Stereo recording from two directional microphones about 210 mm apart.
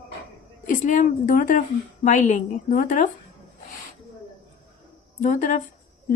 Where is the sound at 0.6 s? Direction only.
35° left (ahead or behind).